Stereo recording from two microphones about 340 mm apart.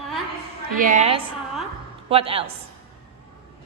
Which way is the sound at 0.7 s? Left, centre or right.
Right.